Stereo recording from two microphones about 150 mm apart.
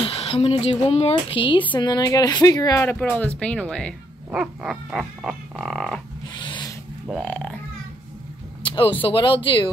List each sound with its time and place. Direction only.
0.0 s a woman's voice: 40° left (ahead or behind); by 3.9 s 5° left (ahead or behind)
4.3 s frog: 5° right (ahead or behind)
6.3 s vehicle: 30° left (ahead or behind)
7.1 s speech: 5° left (ahead or behind)
8.6 s a sound: 35° left (ahead or behind)
9.0 s speech: 35° left (ahead or behind)